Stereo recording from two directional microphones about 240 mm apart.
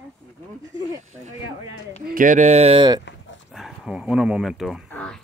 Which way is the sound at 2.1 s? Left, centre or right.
Right.